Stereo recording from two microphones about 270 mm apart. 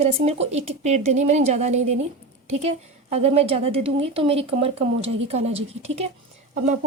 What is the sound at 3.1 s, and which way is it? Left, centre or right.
A woman's voice, right.